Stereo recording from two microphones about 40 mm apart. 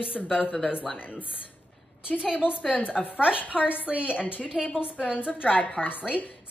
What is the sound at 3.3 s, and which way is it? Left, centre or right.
A woman's voice, left.